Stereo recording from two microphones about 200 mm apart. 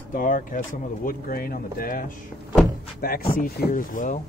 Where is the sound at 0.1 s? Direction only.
40° left (ahead or behind).